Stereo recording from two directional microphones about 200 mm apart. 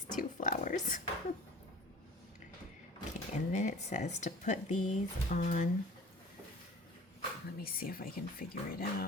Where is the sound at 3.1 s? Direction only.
35° left (ahead or behind).